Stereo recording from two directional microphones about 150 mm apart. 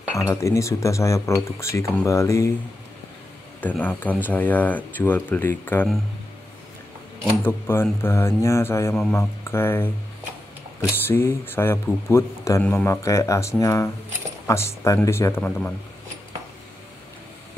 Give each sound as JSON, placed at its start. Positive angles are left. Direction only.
{"t": 0.2, "sound": "speech", "side_deg": 20}
{"t": 3.6, "sound": "speech", "side_deg": 10}
{"t": 7.4, "sound": "speech", "side_deg": 15}